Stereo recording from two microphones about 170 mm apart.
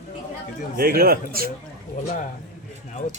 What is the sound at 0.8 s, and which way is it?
Speech, 60° right (ahead or behind).